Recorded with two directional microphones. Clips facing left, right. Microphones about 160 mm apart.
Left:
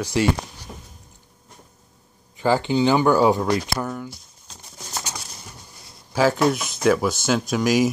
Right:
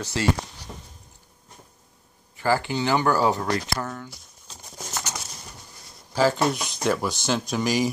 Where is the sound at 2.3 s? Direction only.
20° left (ahead or behind).